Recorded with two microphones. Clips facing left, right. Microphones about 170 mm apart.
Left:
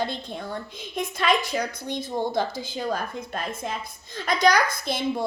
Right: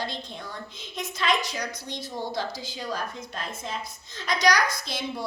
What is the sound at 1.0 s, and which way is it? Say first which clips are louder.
A woman's voice: left 3 dB; 55° left (ahead or behind).